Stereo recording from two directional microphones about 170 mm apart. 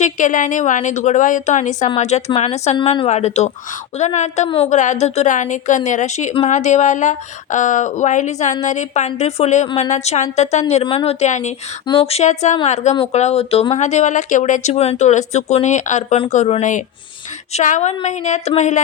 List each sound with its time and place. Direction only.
0.0 s a woman's voice: 50° left (ahead or behind)